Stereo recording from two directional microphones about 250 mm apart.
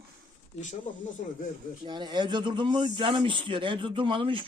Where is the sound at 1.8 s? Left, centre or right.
Centre.